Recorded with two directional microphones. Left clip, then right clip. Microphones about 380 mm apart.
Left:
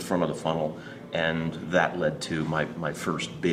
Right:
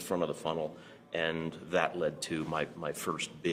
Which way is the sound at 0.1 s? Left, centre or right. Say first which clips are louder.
Left 6 dB; right.